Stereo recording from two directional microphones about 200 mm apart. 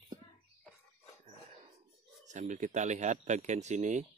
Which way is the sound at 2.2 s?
35° right (ahead or behind).